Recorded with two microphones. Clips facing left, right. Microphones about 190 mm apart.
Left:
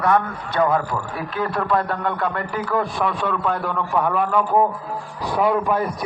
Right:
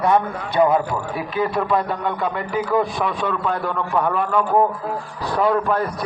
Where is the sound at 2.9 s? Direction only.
5° left (ahead or behind).